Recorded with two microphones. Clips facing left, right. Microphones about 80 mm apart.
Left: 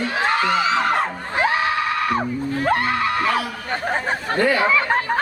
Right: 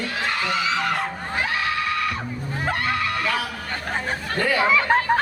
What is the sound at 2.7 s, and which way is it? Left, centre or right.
Speech, left.